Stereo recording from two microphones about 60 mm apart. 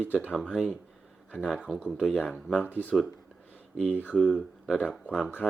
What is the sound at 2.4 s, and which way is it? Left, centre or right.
Speech, centre.